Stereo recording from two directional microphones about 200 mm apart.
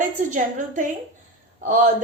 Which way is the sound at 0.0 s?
40° right (ahead or behind).